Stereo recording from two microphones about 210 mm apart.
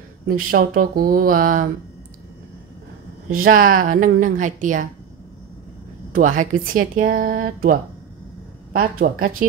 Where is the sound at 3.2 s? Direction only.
40° right (ahead or behind).